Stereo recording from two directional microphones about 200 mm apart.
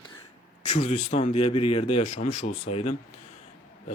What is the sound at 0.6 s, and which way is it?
Speech, 35° left (ahead or behind).